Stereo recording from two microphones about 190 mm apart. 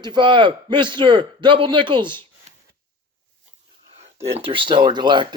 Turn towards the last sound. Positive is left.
turn(degrees=-25)  # may be behind; listen again after turning